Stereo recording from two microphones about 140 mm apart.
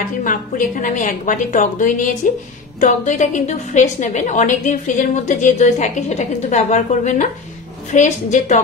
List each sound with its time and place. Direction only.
0.2 s a woman's voice: 70° left (ahead or behind)